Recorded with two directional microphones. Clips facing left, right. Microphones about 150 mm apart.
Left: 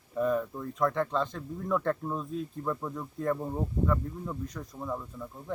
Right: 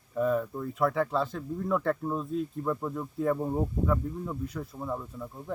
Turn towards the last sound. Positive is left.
turn(degrees=-10)  # may be behind; listen again after turning